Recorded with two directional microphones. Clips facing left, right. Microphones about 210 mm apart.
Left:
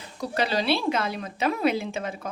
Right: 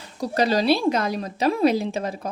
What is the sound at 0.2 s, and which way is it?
A woman's voice, 40° right (ahead or behind).